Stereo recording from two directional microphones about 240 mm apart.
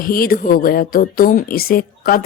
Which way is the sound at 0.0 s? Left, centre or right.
Left.